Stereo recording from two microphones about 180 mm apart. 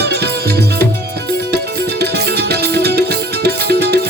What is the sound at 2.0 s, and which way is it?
Music, 65° right (ahead or behind).